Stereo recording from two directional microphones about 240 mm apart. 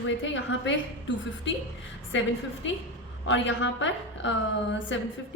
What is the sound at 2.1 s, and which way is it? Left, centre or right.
A woman's voice, left.